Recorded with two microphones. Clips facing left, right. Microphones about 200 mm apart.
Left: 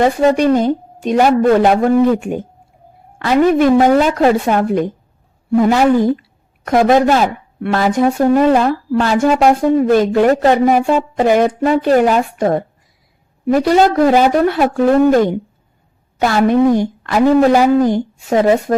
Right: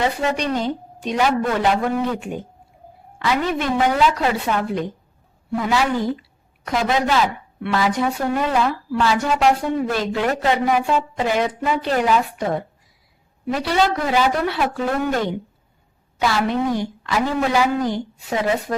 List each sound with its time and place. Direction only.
0.0 s speech: 45° left (ahead or behind)